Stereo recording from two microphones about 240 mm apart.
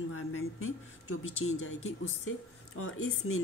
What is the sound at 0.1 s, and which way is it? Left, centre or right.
A woman's voice, left.